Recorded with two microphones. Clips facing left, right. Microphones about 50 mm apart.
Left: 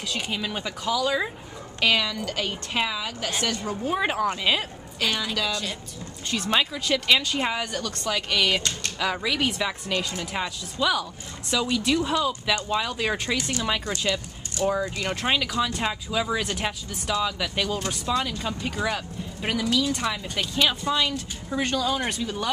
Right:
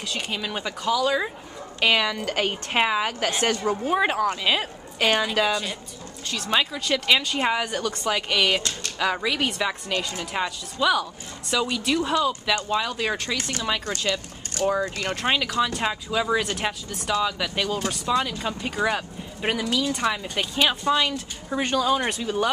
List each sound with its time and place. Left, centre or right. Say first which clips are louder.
0.0 s speech: even; centre
1.8 s speech: right 2 dB; centre
2.2 s a woman's voice: right 4 dB; right
3.8 s speech: right 1 dB; centre
4.9 s a woman's voice: right 5 dB; right
5.5 s speech: right 3 dB; centre
14.6 s speech: right 1 dB; right
15.0 s speech: even; centre